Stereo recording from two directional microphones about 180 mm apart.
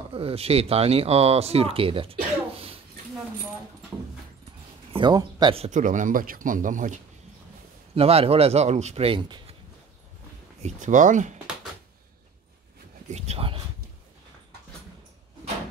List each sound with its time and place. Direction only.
0.1 s speech: 30° right (ahead or behind)
4.9 s speech: 25° right (ahead or behind)
5.7 s speech: 45° right (ahead or behind)
7.9 s speech: 35° right (ahead or behind)
10.6 s speech: 45° right (ahead or behind)
13.1 s speech: 35° right (ahead or behind)